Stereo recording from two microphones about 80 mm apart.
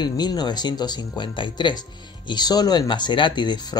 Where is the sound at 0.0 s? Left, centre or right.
Left.